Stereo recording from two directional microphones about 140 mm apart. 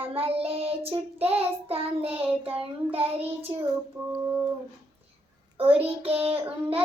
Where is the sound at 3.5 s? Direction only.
30° right (ahead or behind).